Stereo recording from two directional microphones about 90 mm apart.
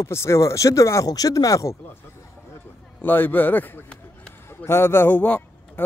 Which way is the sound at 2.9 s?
25° left (ahead or behind).